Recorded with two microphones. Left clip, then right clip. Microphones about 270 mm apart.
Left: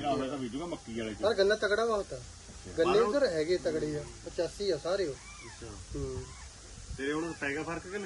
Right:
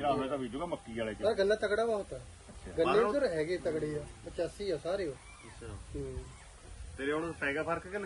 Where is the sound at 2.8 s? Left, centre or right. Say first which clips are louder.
Left 2 dB; centre.